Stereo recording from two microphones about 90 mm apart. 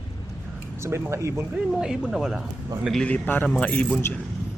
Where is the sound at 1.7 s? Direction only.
10° right (ahead or behind).